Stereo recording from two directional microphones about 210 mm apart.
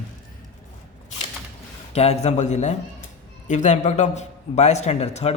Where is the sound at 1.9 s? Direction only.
30° left (ahead or behind).